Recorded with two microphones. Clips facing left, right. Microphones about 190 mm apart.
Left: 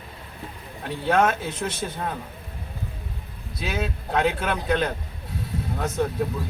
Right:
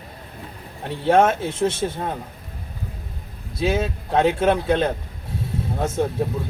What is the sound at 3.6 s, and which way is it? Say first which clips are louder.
A man's voice: right 7 dB; 30° right (ahead or behind).